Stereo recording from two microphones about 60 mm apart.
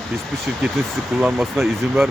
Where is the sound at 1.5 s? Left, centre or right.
Centre.